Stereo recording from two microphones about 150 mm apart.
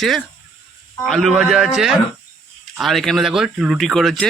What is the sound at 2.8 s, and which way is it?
Speech, centre (ahead or behind).